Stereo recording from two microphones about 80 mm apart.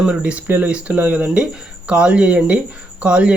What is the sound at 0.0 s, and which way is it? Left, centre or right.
Speech, centre.